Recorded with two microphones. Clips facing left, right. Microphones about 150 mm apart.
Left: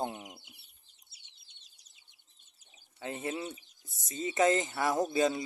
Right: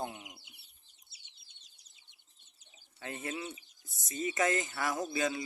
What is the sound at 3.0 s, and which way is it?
Speech, 20° left (ahead or behind).